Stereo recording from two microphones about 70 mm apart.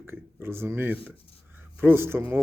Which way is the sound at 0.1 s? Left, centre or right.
Right.